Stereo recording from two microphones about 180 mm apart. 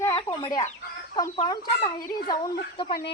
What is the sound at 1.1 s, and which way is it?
Fowl, 25° left (ahead or behind).